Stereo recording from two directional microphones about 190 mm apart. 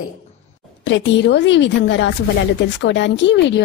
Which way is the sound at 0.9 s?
70° left (ahead or behind).